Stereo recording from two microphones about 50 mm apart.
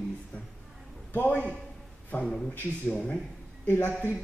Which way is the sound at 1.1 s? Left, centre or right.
Left.